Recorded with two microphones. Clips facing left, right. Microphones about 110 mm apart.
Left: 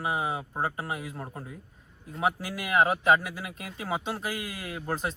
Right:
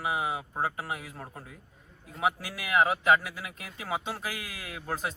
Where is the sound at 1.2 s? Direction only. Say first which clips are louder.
Left 4 dB; 15° left (ahead or behind).